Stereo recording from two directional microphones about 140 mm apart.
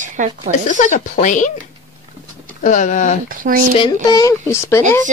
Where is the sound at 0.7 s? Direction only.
65° left (ahead or behind).